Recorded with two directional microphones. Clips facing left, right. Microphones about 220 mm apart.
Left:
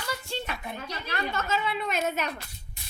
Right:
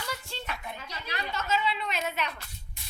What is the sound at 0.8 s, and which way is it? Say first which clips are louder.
A woman's voice: left 5 dB; 55° left (ahead or behind).